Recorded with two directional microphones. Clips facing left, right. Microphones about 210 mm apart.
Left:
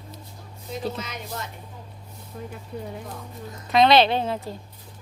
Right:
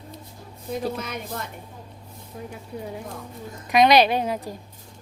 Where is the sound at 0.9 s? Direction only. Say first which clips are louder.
Right 3 dB; 55° right (ahead or behind).